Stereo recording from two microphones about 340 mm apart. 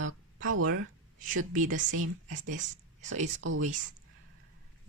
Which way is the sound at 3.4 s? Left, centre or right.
Right.